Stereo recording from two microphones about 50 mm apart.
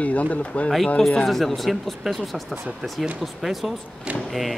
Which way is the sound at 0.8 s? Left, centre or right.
Centre.